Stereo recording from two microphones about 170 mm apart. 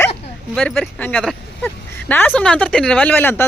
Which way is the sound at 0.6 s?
Centre (ahead or behind).